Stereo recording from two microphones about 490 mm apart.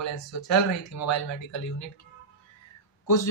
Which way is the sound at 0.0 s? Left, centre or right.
Left.